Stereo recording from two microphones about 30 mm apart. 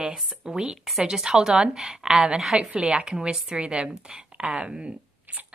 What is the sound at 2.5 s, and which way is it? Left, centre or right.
Speech, right.